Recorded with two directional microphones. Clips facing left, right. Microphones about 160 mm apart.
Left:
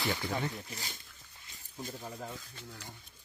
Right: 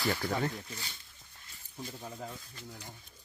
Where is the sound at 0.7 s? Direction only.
40° left (ahead or behind).